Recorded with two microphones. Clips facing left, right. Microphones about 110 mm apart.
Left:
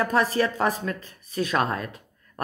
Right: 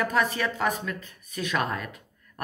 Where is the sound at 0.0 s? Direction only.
35° left (ahead or behind).